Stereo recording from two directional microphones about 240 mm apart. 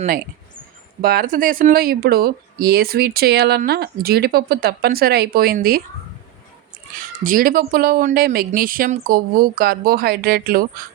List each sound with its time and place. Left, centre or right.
1.0 s speech: right
7.3 s speech: right